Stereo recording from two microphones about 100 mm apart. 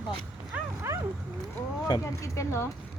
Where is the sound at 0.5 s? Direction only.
15° right (ahead or behind).